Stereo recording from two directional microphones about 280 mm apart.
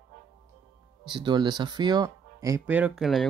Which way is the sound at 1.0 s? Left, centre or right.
Centre.